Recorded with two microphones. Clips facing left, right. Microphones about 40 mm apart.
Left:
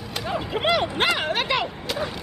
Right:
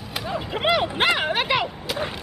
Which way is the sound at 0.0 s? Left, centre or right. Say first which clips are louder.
Left 1 dB; centre.